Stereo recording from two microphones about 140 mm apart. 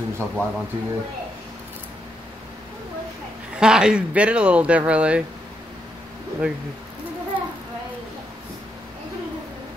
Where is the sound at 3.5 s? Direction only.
5° right (ahead or behind).